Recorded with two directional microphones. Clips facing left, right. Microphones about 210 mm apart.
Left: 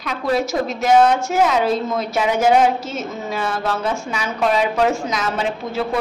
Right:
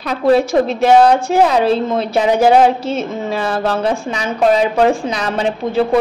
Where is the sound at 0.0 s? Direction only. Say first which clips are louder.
Right 7 dB; 35° right (ahead or behind).